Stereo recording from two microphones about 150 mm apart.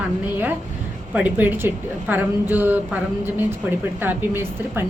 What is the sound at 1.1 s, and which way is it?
A woman's voice, 10° right (ahead or behind).